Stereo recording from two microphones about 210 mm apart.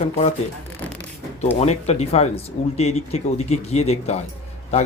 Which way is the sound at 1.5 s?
30° left (ahead or behind).